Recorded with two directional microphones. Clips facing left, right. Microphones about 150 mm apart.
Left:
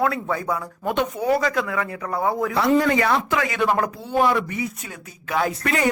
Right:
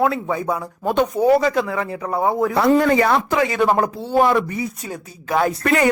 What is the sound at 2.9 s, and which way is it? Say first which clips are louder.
Speech: right 3 dB; 35° right (ahead or behind).